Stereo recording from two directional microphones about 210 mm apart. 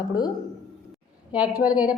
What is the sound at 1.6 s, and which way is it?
Speech, 5° right (ahead or behind).